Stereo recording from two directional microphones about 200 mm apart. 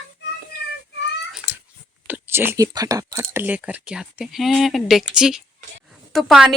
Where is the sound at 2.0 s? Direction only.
10° right (ahead or behind).